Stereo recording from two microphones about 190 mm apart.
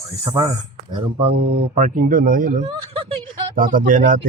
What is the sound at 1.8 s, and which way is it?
Speech, 45° right (ahead or behind).